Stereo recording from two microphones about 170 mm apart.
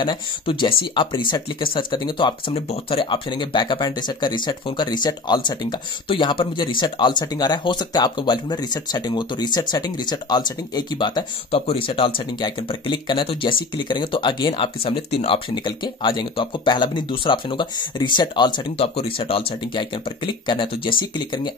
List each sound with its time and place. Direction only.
0.0 s speech: 30° left (ahead or behind)